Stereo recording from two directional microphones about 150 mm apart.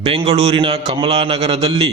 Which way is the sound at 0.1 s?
45° right (ahead or behind).